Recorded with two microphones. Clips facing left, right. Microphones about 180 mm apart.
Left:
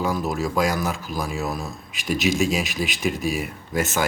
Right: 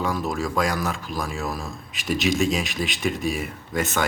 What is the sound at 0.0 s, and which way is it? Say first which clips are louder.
Speech: left 1 dB; centre (ahead or behind).